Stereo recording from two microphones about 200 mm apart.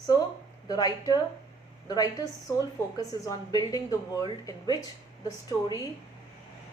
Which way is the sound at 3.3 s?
20° left (ahead or behind).